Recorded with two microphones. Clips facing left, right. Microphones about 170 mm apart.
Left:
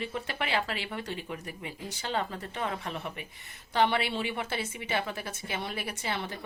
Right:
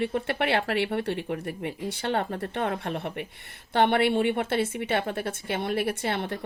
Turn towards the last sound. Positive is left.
turn(degrees=-60)  # may be behind; listen again after turning